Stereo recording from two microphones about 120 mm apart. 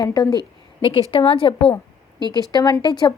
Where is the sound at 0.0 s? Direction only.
30° left (ahead or behind).